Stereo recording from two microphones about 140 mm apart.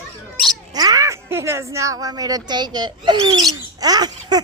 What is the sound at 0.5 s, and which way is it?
Speech, 25° right (ahead or behind).